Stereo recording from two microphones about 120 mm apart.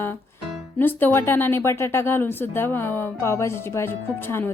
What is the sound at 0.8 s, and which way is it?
Speech, 15° left (ahead or behind).